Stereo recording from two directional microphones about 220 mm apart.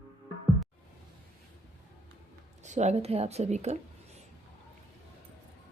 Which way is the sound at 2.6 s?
30° right (ahead or behind).